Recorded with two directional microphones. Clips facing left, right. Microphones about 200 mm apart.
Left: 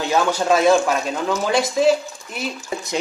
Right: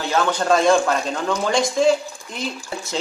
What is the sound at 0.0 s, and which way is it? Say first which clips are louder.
Speech: left 1 dB; 15° left (ahead or behind).